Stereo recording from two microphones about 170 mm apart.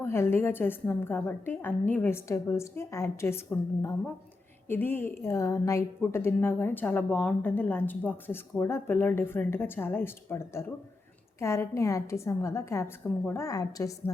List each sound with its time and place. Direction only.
0.0 s a woman's voice: 15° left (ahead or behind)